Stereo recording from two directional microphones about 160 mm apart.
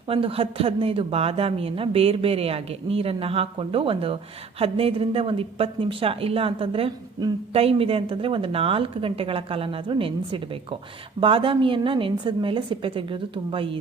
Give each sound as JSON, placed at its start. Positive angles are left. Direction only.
{"t": 0.1, "sound": "speech", "side_deg": -35}